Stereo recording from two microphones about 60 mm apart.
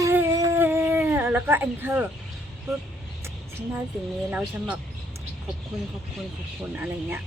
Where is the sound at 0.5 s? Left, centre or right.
Right.